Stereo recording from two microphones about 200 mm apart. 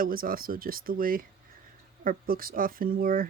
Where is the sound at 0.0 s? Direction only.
45° right (ahead or behind).